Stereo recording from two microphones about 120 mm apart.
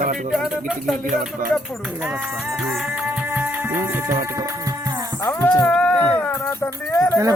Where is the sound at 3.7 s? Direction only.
25° right (ahead or behind).